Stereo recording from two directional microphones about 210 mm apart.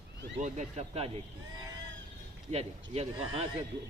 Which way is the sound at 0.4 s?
35° right (ahead or behind).